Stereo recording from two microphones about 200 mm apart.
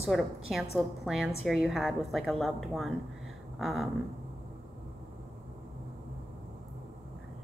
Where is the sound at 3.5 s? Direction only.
Centre (ahead or behind).